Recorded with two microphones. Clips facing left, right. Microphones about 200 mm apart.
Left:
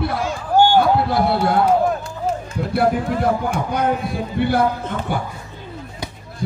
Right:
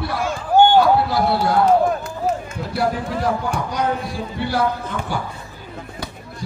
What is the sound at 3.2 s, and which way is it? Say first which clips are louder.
A man's voice: left 2 dB; 55° left (ahead or behind).